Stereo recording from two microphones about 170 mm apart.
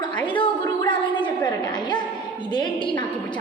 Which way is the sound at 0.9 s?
30° left (ahead or behind).